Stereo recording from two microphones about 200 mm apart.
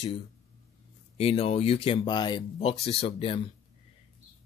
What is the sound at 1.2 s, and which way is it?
Speech, 30° left (ahead or behind).